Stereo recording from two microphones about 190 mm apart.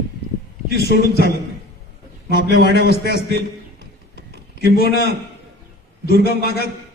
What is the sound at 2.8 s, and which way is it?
Speech, 55° left (ahead or behind).